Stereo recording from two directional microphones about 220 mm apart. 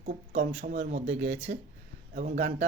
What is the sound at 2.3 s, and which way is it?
Speech, 50° right (ahead or behind).